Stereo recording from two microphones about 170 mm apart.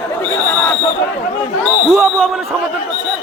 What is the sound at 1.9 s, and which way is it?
Basketball bounce, centre (ahead or behind).